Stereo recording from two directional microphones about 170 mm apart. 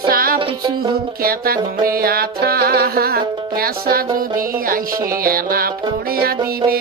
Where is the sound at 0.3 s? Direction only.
30° right (ahead or behind).